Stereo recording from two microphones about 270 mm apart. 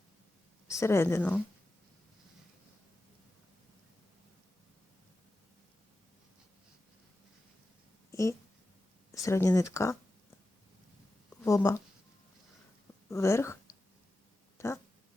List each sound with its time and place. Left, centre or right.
0.7 s speech: centre
8.1 s speech: centre
11.4 s speech: centre
13.1 s speech: centre
14.6 s a sound: centre